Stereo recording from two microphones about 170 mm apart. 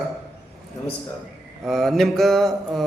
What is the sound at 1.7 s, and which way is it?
Mantra, centre (ahead or behind).